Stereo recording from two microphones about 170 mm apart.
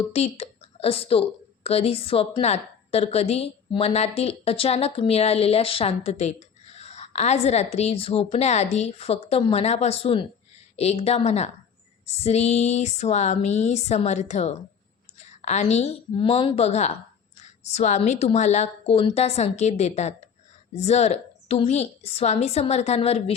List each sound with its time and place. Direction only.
0.1 s a woman's voice: 35° left (ahead or behind)